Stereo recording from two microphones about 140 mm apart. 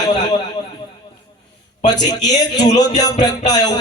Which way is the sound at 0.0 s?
30° left (ahead or behind).